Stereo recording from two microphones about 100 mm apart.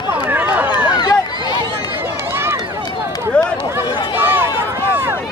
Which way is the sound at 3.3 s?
10° left (ahead or behind).